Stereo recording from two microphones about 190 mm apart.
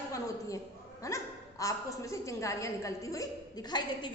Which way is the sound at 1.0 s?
15° left (ahead or behind).